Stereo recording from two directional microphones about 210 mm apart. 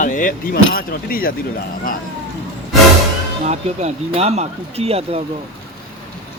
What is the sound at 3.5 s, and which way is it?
Speech, 30° right (ahead or behind).